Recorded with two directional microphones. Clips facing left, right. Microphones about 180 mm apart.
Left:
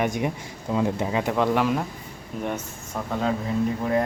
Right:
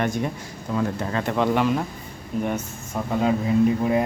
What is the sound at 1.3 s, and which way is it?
Speech, centre (ahead or behind).